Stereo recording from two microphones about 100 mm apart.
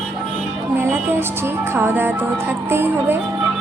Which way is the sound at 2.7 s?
20° right (ahead or behind).